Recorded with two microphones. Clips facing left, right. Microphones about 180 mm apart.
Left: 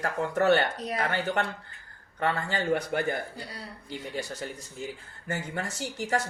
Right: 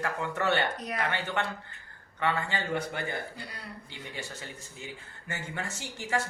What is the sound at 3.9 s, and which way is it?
Speech, 40° left (ahead or behind).